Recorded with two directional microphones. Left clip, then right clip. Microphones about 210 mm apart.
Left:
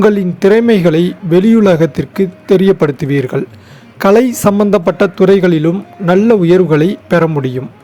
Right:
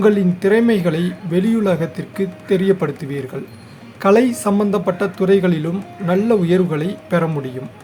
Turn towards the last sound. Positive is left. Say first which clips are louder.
# left 8 dB
turn(degrees=30)  # may be behind; listen again after turning